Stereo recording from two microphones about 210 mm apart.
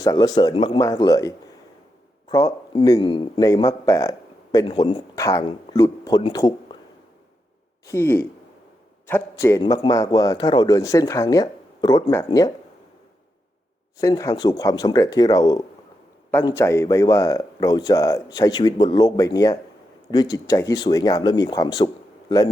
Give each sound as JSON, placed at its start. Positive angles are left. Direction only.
{"t": 0.0, "sound": "a man's voice", "side_deg": 15}
{"t": 7.9, "sound": "a man's voice", "side_deg": 10}
{"t": 14.0, "sound": "a man's voice", "side_deg": 15}